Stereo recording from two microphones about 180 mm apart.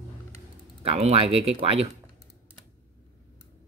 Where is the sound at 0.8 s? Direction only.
35° right (ahead or behind).